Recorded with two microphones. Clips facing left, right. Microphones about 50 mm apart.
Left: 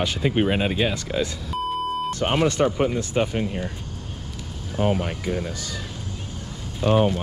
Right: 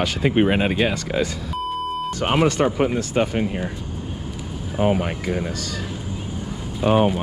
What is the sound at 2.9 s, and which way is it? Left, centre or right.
Speech, right.